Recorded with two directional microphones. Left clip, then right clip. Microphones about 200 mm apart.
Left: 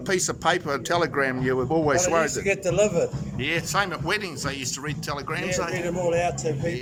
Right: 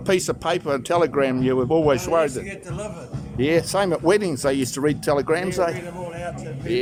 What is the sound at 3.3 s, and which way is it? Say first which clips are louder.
Speech: right 6 dB; 25° right (ahead or behind).